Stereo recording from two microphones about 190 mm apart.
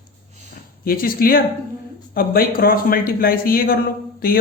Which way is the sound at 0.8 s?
50° left (ahead or behind).